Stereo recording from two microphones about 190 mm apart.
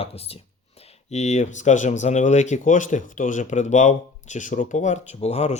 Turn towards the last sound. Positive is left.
turn(degrees=35)  # may be behind; listen again after turning